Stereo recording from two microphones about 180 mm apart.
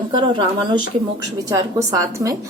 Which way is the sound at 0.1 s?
25° right (ahead or behind).